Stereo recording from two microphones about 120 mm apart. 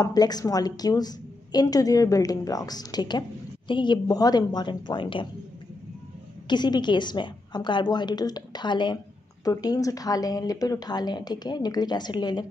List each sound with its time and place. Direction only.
0.0 s a woman's voice: 35° left (ahead or behind)
6.5 s a woman's voice: 40° left (ahead or behind)